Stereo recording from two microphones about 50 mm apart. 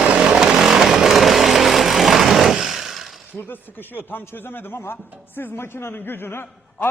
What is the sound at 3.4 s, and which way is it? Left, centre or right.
A man's voice, left.